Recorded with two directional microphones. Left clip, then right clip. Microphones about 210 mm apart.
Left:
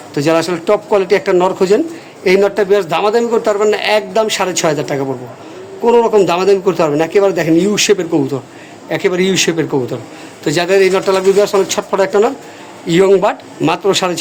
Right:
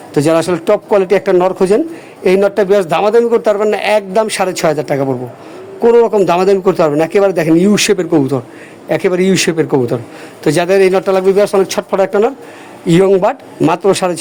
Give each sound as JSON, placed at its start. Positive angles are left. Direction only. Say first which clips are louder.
{"t": 0.1, "sound": "speech", "louder": "right 2 dB", "side_deg": -40}